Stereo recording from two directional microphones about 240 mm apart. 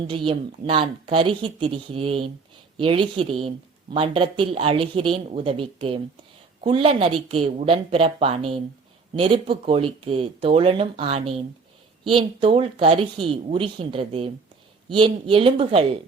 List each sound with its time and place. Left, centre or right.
0.1 s speech: right